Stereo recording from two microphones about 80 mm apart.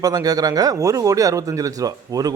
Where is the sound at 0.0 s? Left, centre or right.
Right.